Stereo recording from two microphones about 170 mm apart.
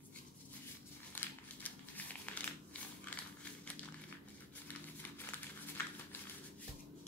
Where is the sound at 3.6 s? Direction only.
10° left (ahead or behind).